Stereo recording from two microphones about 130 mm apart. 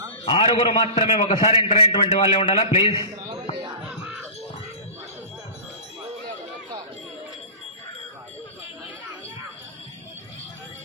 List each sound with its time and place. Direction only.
0.3 s a man's voice: 45° left (ahead or behind)
3.0 s a man's voice: 25° right (ahead or behind)